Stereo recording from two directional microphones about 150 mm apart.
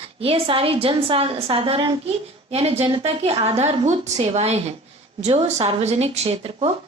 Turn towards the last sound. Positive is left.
turn(degrees=-40)  # may be behind; listen again after turning